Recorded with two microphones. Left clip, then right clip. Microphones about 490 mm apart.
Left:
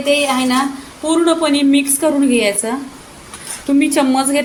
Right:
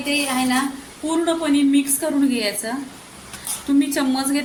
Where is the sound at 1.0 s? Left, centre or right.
Right.